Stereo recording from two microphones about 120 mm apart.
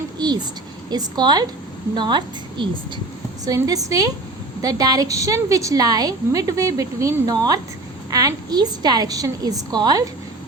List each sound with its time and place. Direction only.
0.2 s a woman's voice: 35° right (ahead or behind)